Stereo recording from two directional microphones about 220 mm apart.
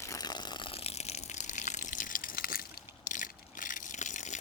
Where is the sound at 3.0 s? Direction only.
35° left (ahead or behind).